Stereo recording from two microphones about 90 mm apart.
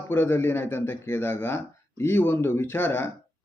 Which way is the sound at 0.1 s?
25° left (ahead or behind).